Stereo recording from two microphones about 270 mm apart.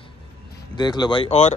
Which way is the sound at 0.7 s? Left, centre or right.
Centre.